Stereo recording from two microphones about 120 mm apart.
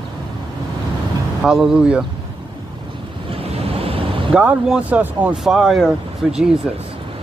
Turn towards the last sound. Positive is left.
turn(degrees=-5)  # may be behind; listen again after turning